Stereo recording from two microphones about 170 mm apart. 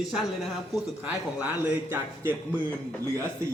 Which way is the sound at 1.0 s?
10° right (ahead or behind).